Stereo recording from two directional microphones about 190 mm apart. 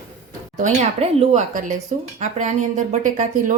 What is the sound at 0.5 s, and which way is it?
A woman's voice, 35° right (ahead or behind).